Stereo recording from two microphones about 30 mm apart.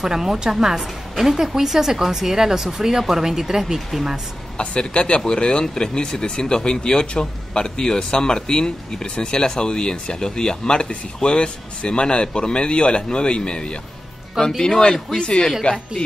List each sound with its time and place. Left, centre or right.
0.0 s a woman's voice: centre
4.6 s speech: left
15.7 s speech: left